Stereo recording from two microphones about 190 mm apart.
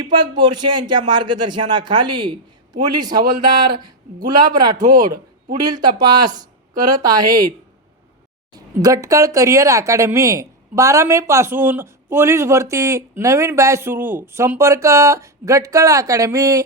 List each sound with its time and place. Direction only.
0.0 s speech: 25° right (ahead or behind)
8.5 s speech: 15° right (ahead or behind)